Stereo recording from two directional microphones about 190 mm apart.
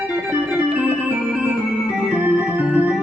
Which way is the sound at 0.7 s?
5° right (ahead or behind).